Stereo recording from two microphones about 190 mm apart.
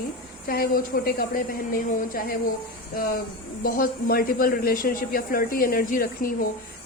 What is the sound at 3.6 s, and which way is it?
A woman's voice, 50° left (ahead or behind).